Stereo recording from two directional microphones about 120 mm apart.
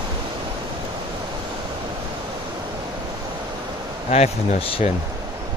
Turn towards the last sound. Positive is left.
turn(degrees=55)  # may be behind; listen again after turning